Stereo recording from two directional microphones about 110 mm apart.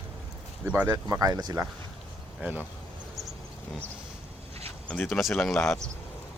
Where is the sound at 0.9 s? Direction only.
30° right (ahead or behind).